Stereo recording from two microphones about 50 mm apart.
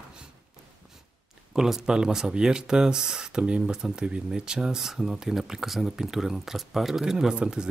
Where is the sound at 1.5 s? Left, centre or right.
Centre.